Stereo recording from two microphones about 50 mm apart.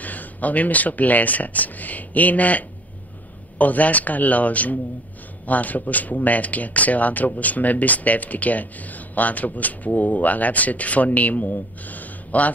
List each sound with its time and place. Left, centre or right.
0.0 s speech: left